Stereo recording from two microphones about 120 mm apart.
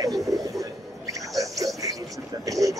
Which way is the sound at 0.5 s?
30° right (ahead or behind).